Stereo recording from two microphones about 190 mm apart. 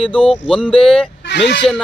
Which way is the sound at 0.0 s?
5° left (ahead or behind).